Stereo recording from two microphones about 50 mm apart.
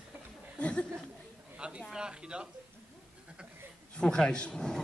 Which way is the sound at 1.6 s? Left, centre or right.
Centre.